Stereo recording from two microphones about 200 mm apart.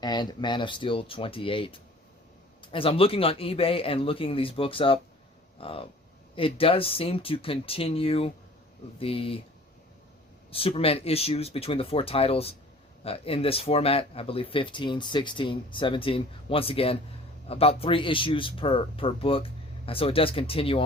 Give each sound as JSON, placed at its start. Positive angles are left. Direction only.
{"t": 0.0, "sound": "speech", "side_deg": 20}
{"t": 10.5, "sound": "speech", "side_deg": 30}